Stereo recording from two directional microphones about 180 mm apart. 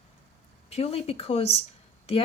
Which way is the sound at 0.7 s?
35° left (ahead or behind).